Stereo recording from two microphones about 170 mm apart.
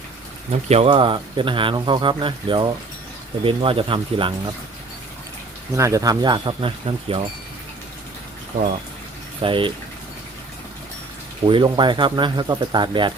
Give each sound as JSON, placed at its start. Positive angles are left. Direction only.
{"t": 0.7, "sound": "speech", "side_deg": -35}
{"t": 5.7, "sound": "speech", "side_deg": -20}
{"t": 9.4, "sound": "speech", "side_deg": -30}
{"t": 11.4, "sound": "speech", "side_deg": -30}